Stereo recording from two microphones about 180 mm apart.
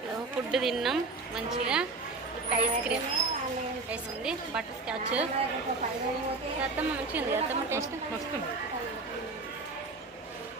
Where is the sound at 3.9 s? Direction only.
5° right (ahead or behind).